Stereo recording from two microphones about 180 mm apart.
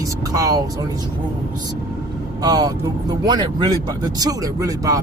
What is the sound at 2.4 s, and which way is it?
Speech, 20° right (ahead or behind).